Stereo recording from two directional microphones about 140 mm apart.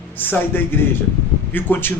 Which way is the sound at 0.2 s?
15° left (ahead or behind).